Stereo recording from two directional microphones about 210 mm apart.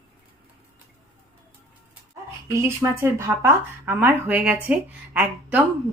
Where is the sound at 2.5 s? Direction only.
10° right (ahead or behind).